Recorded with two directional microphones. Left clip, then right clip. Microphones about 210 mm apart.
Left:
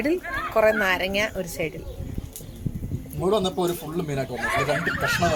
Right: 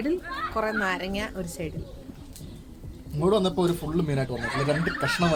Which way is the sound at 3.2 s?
40° right (ahead or behind).